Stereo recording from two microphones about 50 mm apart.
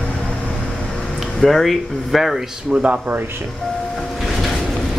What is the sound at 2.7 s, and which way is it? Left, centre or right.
Speech, right.